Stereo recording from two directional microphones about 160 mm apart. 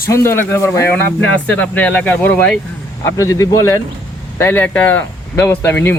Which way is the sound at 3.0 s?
20° left (ahead or behind).